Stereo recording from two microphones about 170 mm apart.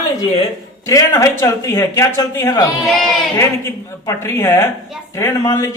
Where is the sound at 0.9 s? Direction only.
20° left (ahead or behind).